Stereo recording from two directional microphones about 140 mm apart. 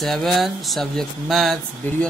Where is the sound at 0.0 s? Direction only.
Centre (ahead or behind).